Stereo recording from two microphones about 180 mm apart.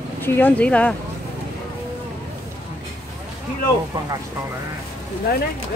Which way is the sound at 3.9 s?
25° right (ahead or behind).